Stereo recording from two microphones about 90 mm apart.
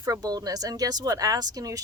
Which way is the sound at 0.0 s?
45° right (ahead or behind).